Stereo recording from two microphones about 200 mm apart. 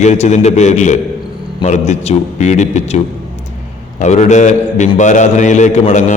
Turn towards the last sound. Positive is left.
turn(degrees=35)  # may be behind; listen again after turning